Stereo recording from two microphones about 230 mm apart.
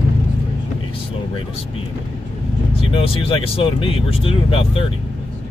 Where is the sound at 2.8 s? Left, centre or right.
Left.